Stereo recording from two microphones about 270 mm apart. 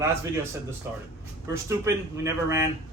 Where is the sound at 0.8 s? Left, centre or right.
Centre.